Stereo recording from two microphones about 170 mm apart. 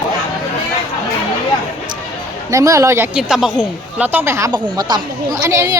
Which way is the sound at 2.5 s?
20° right (ahead or behind).